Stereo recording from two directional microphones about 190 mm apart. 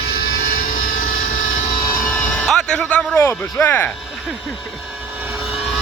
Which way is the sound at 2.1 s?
5° left (ahead or behind).